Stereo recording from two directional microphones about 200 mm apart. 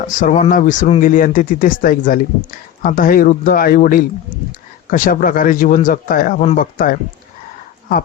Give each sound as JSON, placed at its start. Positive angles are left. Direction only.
{"t": 0.2, "sound": "speech", "side_deg": 40}